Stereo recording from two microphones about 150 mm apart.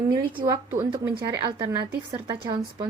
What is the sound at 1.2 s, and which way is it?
Speech, 30° right (ahead or behind).